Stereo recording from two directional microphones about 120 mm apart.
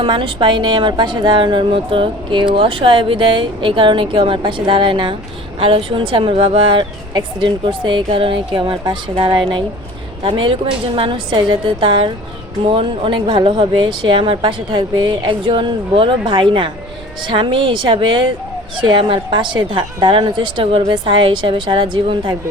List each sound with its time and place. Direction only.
0.0 s speech: 45° right (ahead or behind)